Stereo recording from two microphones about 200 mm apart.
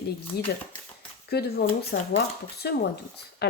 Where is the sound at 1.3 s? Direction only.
50° left (ahead or behind).